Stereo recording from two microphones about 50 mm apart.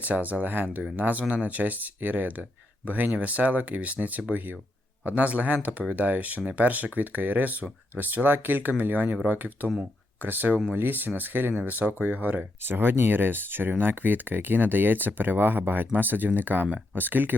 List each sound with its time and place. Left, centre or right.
0.0 s speech: right